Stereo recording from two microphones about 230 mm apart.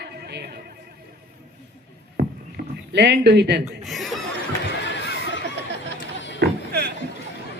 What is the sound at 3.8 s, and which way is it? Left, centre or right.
Speech, centre.